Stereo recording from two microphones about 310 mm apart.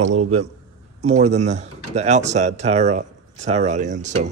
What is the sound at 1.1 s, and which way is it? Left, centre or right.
Speech, right.